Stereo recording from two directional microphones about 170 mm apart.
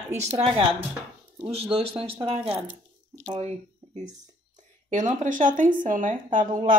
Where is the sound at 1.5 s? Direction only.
35° right (ahead or behind).